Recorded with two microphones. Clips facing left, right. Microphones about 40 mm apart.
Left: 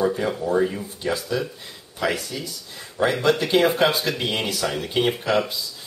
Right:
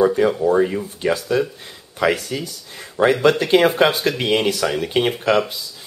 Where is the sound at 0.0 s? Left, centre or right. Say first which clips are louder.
Right 7 dB; right.